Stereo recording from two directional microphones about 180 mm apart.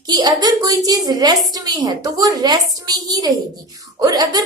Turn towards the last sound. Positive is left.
turn(degrees=-20)  # may be behind; listen again after turning